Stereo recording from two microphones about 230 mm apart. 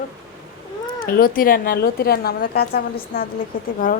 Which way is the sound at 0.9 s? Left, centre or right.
Left.